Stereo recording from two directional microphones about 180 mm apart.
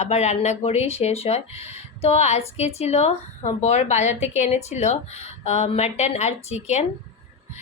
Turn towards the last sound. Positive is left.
turn(degrees=40)  # may be behind; listen again after turning